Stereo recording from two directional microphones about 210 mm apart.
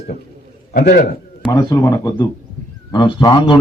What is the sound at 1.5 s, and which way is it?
A man's voice, 15° left (ahead or behind).